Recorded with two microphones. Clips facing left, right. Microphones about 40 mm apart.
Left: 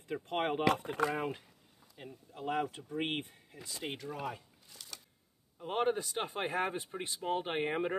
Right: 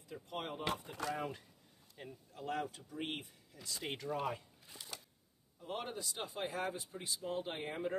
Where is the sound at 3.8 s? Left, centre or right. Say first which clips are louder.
Left 1 dB; centre.